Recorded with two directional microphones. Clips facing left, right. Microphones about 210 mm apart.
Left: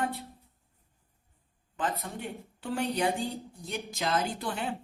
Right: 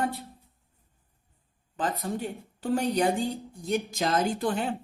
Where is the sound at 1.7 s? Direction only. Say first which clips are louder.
Right 4 dB; 35° right (ahead or behind).